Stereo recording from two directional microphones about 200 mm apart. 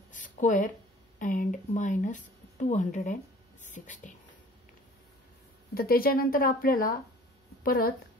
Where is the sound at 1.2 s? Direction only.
40° left (ahead or behind).